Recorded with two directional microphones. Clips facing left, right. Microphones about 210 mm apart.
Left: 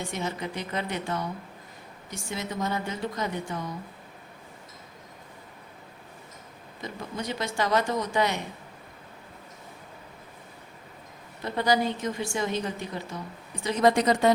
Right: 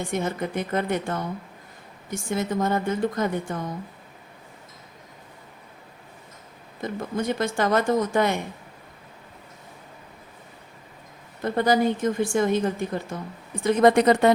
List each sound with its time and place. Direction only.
0.1 s a woman's voice: 50° right (ahead or behind)
6.8 s a woman's voice: 50° right (ahead or behind)
11.4 s a woman's voice: 50° right (ahead or behind)